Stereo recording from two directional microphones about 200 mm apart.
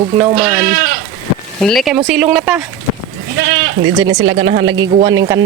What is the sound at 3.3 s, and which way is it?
Speech, 65° right (ahead or behind).